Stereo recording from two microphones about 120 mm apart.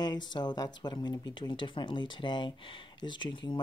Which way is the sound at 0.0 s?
35° left (ahead or behind).